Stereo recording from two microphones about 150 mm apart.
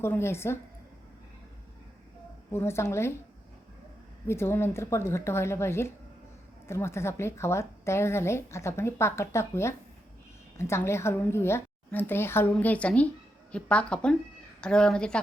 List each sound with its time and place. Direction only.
0.0 s speech: 15° left (ahead or behind)
2.5 s speech: 15° left (ahead or behind)
4.3 s speech: 15° left (ahead or behind)